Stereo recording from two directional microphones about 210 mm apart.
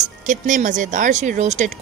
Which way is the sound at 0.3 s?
35° right (ahead or behind).